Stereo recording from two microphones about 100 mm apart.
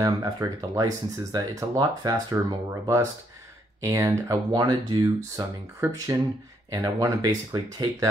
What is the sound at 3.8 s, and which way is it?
Speech, 35° right (ahead or behind).